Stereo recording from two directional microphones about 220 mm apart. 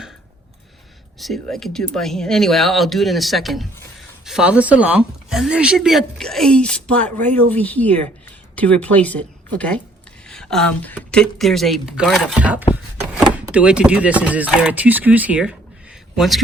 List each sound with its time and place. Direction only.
1.2 s a woman's voice: centre (ahead or behind)
12.7 s a sound: 5° right (ahead or behind)
13.5 s a woman's voice: 5° right (ahead or behind)